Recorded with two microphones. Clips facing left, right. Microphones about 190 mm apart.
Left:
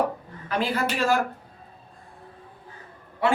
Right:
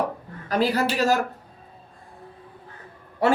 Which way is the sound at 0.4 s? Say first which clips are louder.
Right 4 dB; 40° right (ahead or behind).